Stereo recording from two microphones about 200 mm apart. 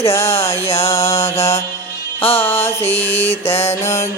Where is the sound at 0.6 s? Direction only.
30° left (ahead or behind).